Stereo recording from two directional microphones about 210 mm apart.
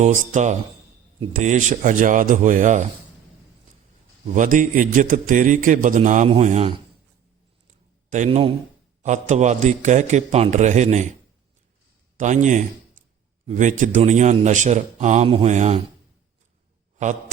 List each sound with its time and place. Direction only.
0.0 s a man's voice: 35° right (ahead or behind)
4.4 s a man's voice: 35° right (ahead or behind)
8.1 s a man's voice: 30° right (ahead or behind)
12.1 s a man's voice: 35° right (ahead or behind)